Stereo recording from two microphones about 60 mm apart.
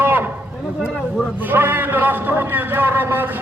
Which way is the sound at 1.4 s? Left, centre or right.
Right.